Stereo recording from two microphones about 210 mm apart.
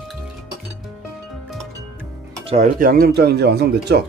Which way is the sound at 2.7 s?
45° right (ahead or behind).